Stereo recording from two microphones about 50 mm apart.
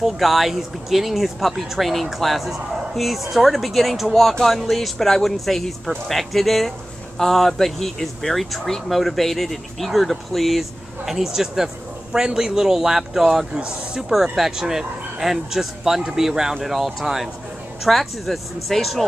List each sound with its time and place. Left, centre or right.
0.0 s speech: centre
14.1 s speech: centre